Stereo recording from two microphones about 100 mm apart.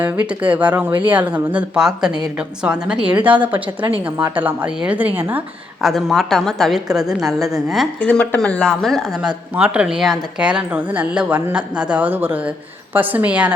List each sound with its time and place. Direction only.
0.0 s a woman's voice: 15° right (ahead or behind)
5.8 s a woman's voice: centre (ahead or behind)
8.0 s speech: 10° left (ahead or behind)
9.6 s a woman's voice: 10° right (ahead or behind)